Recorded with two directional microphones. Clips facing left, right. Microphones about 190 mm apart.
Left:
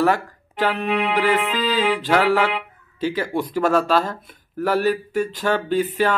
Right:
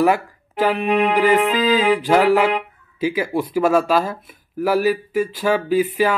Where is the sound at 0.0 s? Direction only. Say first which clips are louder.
Right 2 dB; 10° right (ahead or behind).